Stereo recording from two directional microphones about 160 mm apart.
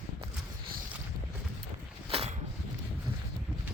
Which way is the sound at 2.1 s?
35° right (ahead or behind).